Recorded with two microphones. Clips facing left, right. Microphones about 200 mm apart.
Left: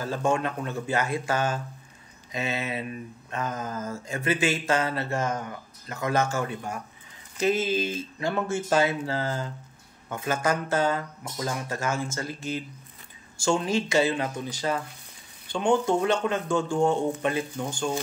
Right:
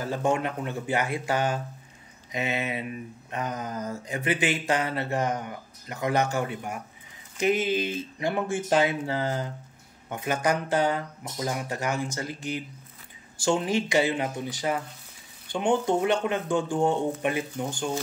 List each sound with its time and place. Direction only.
0.0 s a man's voice: 20° right (ahead or behind)
13.5 s a man's voice: 20° right (ahead or behind)